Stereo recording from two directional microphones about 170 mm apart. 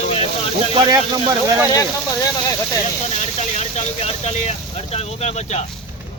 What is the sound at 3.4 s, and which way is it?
Speech, 40° left (ahead or behind).